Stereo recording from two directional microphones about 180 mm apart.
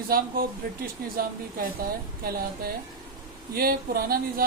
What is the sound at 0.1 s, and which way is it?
Speech, 55° right (ahead or behind).